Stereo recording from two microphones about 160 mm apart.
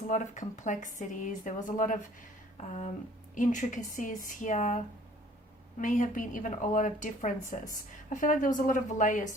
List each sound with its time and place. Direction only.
0.1 s a woman's voice: 50° left (ahead or behind)
5.8 s a woman's voice: 55° left (ahead or behind)